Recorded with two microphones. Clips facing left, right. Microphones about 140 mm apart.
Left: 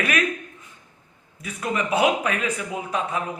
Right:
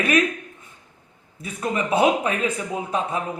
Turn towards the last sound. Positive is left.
turn(degrees=-30)  # may be behind; listen again after turning